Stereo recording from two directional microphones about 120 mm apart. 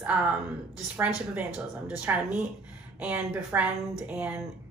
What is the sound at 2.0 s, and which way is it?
A woman's voice, 15° right (ahead or behind).